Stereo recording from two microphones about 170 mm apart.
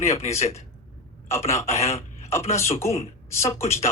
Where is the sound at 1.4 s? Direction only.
15° left (ahead or behind).